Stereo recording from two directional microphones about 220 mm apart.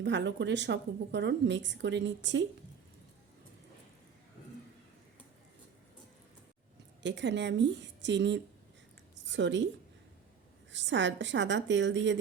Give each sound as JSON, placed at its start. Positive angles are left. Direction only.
{"t": 0.0, "sound": "a woman's voice", "side_deg": -55}
{"t": 7.0, "sound": "a woman's voice", "side_deg": -55}
{"t": 10.7, "sound": "a woman's voice", "side_deg": -55}